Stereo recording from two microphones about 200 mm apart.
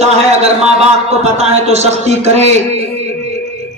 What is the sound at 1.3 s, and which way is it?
A man's voice, 35° right (ahead or behind).